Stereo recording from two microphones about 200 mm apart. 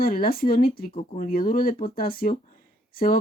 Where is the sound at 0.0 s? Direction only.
45° left (ahead or behind).